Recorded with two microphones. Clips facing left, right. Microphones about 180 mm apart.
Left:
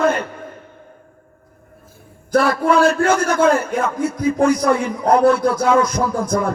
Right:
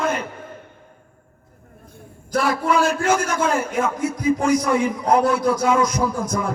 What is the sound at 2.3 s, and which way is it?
A man's voice, 55° left (ahead or behind).